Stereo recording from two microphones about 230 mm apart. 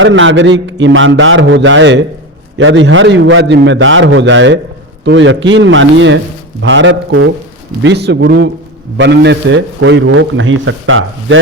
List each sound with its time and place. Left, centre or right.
0.0 s a man's voice: right